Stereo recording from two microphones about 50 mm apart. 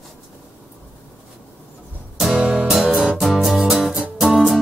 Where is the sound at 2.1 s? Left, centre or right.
Centre.